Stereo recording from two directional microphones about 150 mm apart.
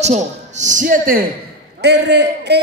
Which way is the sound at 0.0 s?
50° right (ahead or behind).